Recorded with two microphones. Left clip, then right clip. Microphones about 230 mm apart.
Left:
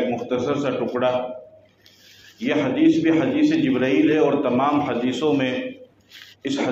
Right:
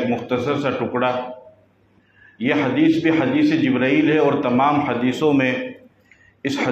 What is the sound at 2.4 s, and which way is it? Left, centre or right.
A man's voice, right.